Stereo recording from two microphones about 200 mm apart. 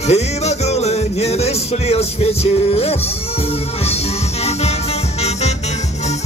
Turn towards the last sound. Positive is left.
turn(degrees=35)  # may be behind; listen again after turning